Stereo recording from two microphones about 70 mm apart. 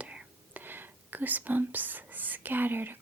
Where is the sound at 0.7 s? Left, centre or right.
Right.